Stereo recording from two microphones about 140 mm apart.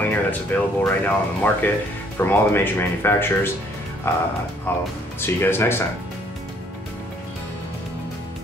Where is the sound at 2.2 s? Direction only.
15° left (ahead or behind).